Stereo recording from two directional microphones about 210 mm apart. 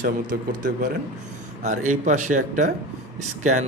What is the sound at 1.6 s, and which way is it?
Speech, 35° right (ahead or behind).